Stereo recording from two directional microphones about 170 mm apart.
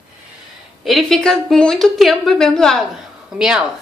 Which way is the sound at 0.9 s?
Centre (ahead or behind).